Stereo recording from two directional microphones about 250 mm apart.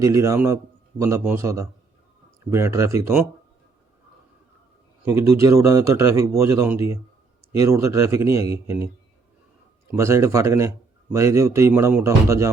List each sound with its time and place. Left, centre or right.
0.0 s a man's voice: centre
5.0 s a man's voice: centre
9.9 s a man's voice: centre